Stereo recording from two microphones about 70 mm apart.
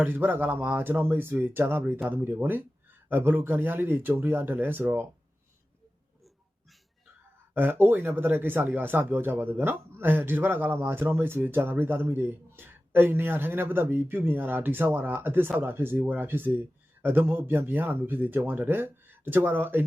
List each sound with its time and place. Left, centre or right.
0.0 s speech: right
7.5 s speech: right